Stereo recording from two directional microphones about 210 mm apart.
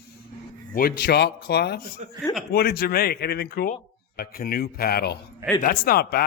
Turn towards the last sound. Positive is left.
turn(degrees=45)  # may be behind; listen again after turning